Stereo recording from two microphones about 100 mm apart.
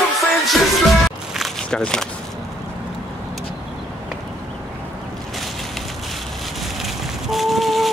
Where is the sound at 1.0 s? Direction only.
Centre (ahead or behind).